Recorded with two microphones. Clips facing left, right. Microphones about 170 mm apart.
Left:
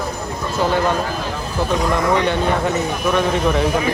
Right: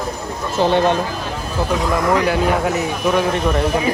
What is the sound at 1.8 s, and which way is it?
Speech, centre (ahead or behind).